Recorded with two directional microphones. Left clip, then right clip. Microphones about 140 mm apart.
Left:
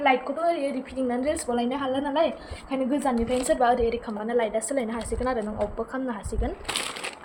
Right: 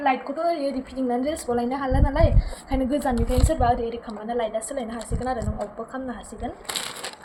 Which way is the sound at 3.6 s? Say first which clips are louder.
Left 1 dB; 50° left (ahead or behind).